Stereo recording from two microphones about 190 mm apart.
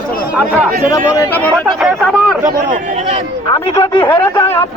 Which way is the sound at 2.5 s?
45° right (ahead or behind).